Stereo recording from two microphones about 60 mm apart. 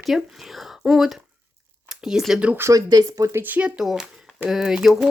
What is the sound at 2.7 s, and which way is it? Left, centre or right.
Speech, right.